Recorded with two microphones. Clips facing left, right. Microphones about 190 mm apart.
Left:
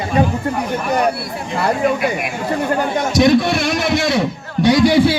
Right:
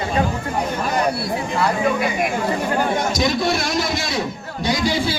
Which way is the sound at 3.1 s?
65° left (ahead or behind).